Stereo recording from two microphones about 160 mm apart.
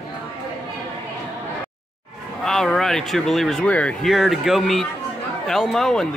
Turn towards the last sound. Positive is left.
turn(degrees=0)  # may be behind; listen again after turning